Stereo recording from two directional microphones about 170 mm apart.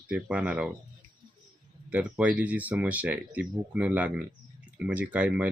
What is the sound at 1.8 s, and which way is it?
Speech, 10° right (ahead or behind).